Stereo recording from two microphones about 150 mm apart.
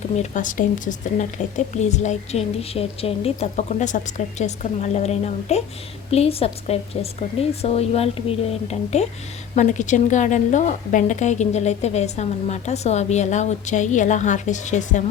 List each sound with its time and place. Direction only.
0.2 s a woman's voice: 60° left (ahead or behind)